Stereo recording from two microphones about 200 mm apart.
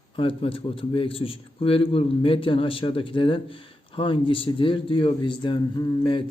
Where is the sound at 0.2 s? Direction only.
25° left (ahead or behind).